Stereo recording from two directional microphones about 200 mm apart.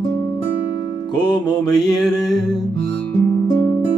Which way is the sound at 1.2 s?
20° left (ahead or behind).